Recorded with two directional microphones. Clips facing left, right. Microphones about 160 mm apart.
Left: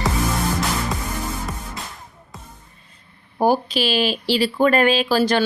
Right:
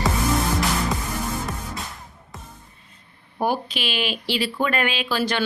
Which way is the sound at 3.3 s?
35° left (ahead or behind).